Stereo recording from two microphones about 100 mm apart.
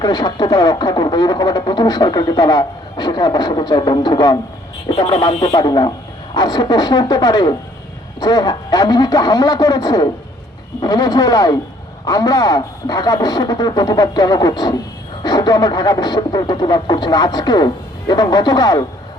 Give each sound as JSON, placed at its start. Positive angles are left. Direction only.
{"t": 0.0, "sound": "speech", "side_deg": 45}